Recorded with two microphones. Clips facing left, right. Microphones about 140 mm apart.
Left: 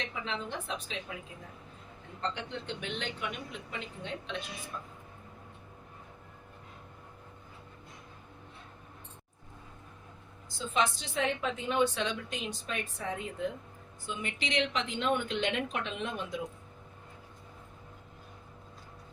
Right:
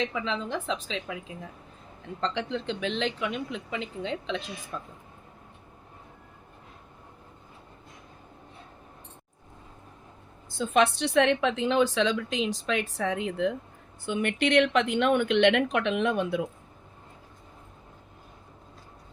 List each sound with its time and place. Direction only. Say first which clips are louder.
0.5 s speech: right 7 dB; 90° right
2.2 s speech: right 7 dB; 90° right
10.6 s a woman's voice: right 8 dB; 65° right (ahead or behind)